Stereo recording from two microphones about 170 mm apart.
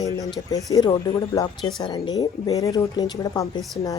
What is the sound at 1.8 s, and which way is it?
A woman's voice, 25° left (ahead or behind).